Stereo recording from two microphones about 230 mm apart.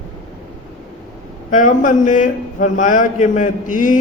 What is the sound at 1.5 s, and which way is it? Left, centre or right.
A man's voice, left.